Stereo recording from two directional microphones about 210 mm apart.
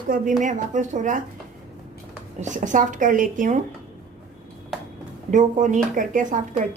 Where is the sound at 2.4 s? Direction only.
35° right (ahead or behind).